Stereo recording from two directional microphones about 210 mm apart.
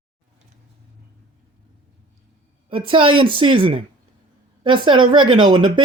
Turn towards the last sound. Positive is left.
turn(degrees=-20)  # may be behind; listen again after turning